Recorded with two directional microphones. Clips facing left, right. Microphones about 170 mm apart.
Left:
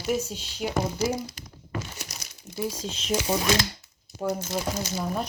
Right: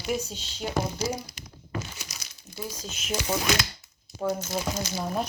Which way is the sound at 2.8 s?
30° left (ahead or behind).